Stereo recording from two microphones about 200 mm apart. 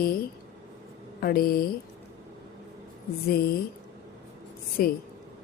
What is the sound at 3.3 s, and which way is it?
Speech, 50° left (ahead or behind).